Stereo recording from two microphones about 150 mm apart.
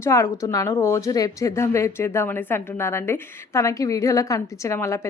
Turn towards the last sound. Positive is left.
turn(degrees=20)  # may be behind; listen again after turning